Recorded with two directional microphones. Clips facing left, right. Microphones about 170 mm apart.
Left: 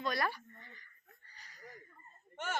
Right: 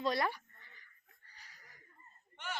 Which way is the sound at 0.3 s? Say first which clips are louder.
Right 1 dB; 15° right (ahead or behind).